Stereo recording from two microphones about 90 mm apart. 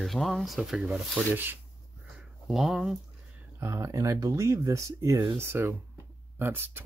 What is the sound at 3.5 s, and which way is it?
Speech, 35° right (ahead or behind).